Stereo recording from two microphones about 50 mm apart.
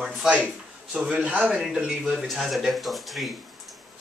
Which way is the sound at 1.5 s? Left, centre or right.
Centre.